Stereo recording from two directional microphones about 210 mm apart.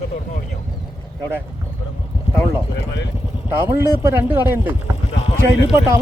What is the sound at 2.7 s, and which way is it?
Speech, 55° left (ahead or behind).